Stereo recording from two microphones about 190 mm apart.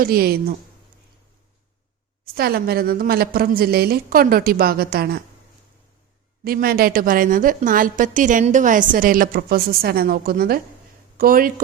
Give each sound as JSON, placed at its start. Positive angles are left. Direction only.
{"t": 0.0, "sound": "a woman's voice", "side_deg": -55}
{"t": 2.2, "sound": "a woman's voice", "side_deg": -55}
{"t": 6.4, "sound": "a woman's voice", "side_deg": -50}